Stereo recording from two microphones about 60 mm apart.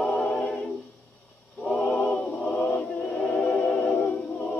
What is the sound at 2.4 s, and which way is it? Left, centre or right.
Music, centre.